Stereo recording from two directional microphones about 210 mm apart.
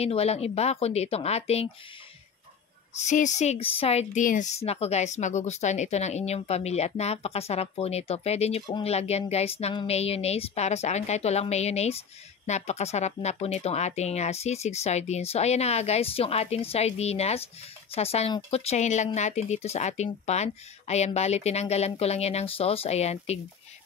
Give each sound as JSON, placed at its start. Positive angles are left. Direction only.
{"t": 0.0, "sound": "speech", "side_deg": 30}
{"t": 3.0, "sound": "a woman's voice", "side_deg": 35}